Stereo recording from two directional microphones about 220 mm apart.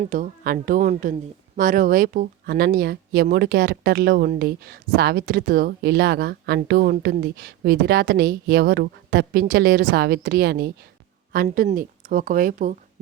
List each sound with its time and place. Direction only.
0.0 s a woman's voice: 35° right (ahead or behind)